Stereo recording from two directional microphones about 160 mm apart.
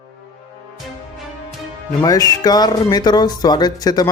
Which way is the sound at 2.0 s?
25° left (ahead or behind).